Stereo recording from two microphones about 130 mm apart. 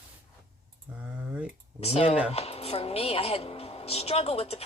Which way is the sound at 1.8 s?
50° left (ahead or behind).